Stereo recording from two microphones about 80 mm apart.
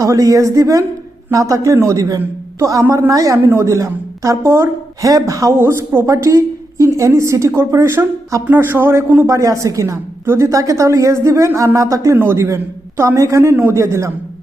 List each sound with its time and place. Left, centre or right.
0.0 s a woman's voice: right
5.5 s a woman's voice: right
9.2 s a woman's voice: right